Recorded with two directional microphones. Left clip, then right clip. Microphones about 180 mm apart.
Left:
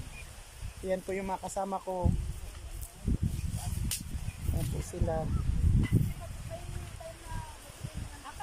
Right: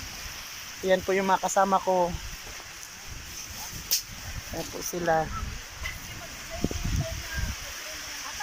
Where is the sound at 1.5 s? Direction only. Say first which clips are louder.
Right 12 dB; 10° right (ahead or behind).